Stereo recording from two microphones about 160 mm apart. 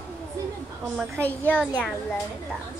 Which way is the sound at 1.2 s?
10° left (ahead or behind).